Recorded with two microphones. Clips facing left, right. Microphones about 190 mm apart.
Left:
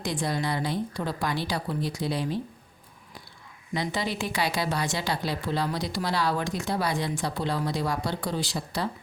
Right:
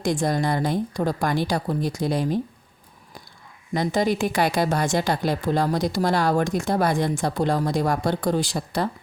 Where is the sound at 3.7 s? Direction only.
45° right (ahead or behind).